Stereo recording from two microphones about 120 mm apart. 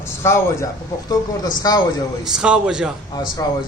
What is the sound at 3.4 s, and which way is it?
Speech, 30° left (ahead or behind).